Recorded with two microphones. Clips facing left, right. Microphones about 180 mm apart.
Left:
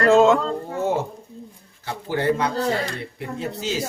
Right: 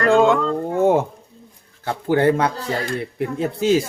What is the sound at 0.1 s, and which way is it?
Speech, centre (ahead or behind).